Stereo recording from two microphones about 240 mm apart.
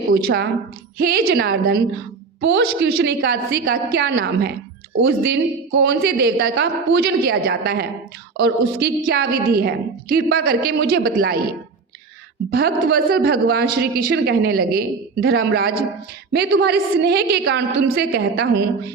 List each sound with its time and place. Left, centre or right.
0.1 s a woman's voice: right
12.5 s a woman's voice: right